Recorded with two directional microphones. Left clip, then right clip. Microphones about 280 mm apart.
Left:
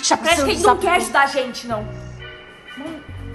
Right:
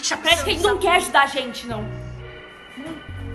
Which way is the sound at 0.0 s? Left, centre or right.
Centre.